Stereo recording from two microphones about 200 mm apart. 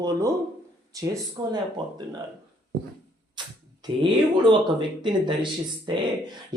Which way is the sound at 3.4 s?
20° right (ahead or behind).